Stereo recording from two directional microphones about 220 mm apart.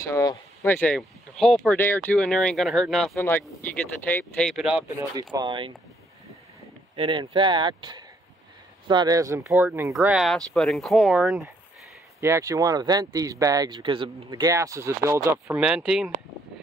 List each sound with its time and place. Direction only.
0.0 s speech: 15° left (ahead or behind); by 4.8 s centre (ahead or behind)
4.8 s speech: 15° right (ahead or behind)
7.0 s speech: 20° right (ahead or behind); by 16.1 s 5° right (ahead or behind)